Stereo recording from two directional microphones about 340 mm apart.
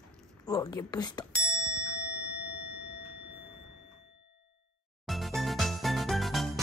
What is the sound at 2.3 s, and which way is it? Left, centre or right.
Clang, left.